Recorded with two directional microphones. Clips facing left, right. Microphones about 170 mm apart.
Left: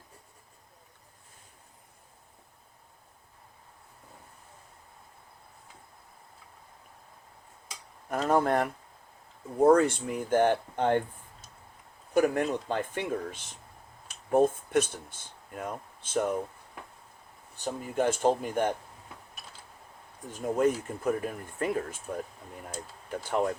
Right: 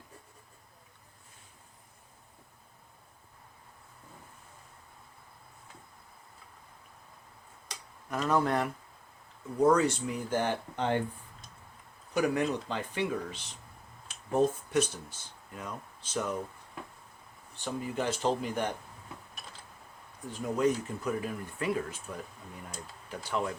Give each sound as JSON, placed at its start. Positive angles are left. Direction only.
{"t": 8.1, "sound": "speech", "side_deg": 50}
{"t": 12.1, "sound": "speech", "side_deg": 50}
{"t": 17.8, "sound": "speech", "side_deg": 50}
{"t": 20.3, "sound": "speech", "side_deg": 50}